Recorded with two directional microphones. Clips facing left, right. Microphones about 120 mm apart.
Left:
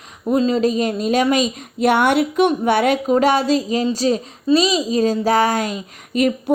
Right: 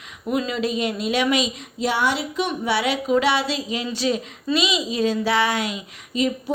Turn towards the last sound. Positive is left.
turn(degrees=55)  # may be behind; listen again after turning